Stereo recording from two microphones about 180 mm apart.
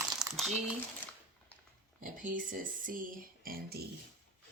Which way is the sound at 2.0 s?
45° right (ahead or behind).